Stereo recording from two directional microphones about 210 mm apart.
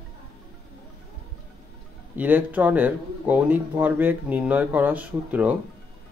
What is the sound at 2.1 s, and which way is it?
Speech, 10° right (ahead or behind).